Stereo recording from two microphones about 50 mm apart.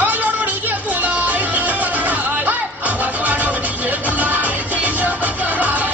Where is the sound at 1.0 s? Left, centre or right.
Right.